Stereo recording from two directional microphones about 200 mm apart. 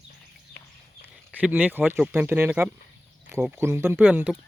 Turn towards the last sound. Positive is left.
turn(degrees=-5)  # may be behind; listen again after turning